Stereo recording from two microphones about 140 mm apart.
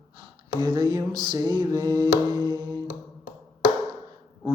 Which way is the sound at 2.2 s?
35° right (ahead or behind).